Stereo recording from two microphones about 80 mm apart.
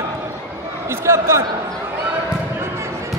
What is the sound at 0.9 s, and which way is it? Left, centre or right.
Speech, right.